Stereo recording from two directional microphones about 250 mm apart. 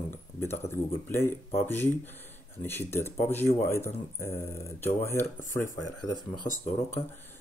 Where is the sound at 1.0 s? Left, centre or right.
Centre.